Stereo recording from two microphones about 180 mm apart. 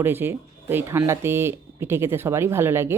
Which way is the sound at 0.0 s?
15° right (ahead or behind).